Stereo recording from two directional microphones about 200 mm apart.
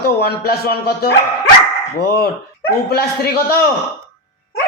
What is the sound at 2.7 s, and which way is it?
Speech, 50° left (ahead or behind).